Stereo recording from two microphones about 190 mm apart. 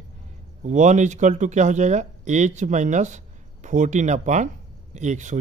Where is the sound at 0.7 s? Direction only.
40° right (ahead or behind).